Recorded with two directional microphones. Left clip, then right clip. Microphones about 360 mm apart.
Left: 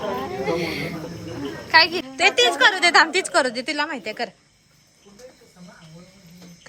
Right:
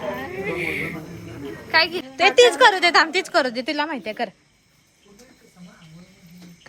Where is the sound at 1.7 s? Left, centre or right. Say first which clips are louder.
Left 3 dB; centre.